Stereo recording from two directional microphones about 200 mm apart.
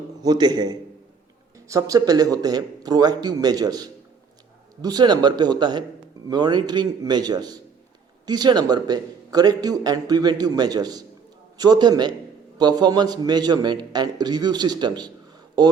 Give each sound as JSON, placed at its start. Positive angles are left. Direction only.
{"t": 0.2, "sound": "speech", "side_deg": -20}